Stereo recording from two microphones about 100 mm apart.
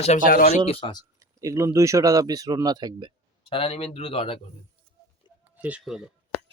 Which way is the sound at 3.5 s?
80° left.